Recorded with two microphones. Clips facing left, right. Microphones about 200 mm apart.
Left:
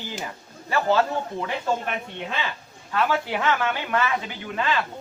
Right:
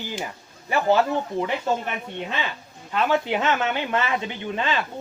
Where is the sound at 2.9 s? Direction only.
20° right (ahead or behind).